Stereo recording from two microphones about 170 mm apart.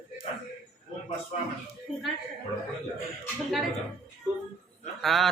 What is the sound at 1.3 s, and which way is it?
Speech, 45° left (ahead or behind).